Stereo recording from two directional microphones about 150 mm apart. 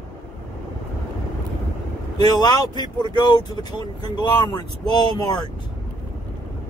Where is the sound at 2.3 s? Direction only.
25° left (ahead or behind).